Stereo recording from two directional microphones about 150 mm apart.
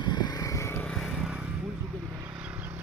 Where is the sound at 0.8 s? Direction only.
Centre (ahead or behind); by 2.8 s 15° right (ahead or behind).